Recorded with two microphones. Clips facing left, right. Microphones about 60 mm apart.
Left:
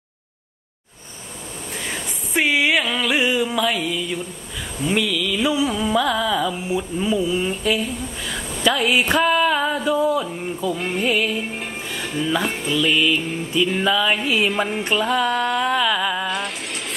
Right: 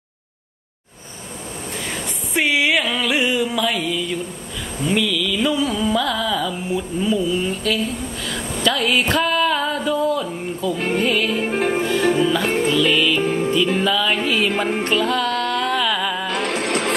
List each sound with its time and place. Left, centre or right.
1.9 s a sound: centre
4.8 s carnatic music: centre
8.6 s a sound: centre
11.1 s carnatic music: centre
11.3 s music: right
12.7 s carnatic music: centre
13.2 s music: right
13.7 s carnatic music: centre
14.9 s music: centre
16.3 s music: right